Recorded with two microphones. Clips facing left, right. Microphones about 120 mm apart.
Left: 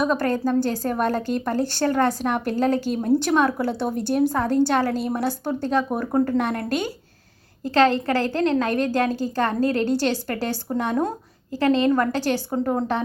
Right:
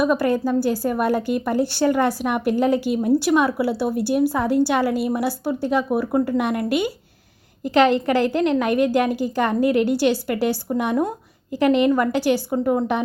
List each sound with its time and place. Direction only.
0.0 s a woman's voice: 10° right (ahead or behind)